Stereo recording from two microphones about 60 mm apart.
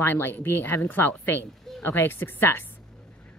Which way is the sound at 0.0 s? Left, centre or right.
Left.